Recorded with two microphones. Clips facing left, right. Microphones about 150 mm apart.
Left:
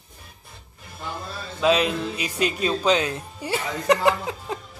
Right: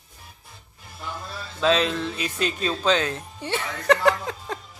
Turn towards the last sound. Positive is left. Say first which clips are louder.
# even
turn(degrees=10)  # may be behind; listen again after turning